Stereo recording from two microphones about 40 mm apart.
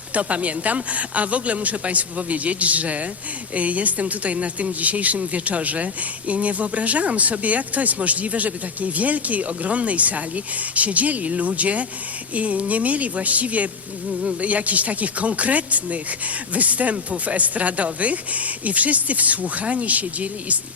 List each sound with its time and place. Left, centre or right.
0.1 s a woman's voice: right